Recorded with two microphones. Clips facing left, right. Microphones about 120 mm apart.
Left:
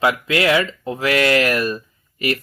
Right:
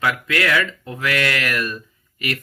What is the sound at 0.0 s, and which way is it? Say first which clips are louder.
Speech: left 4 dB; 25° left (ahead or behind).